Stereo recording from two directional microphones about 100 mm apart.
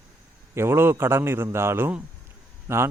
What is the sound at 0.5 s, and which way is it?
Speech, 25° right (ahead or behind).